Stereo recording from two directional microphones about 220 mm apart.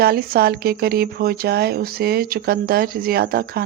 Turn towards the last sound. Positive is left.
turn(degrees=-45)  # may be behind; listen again after turning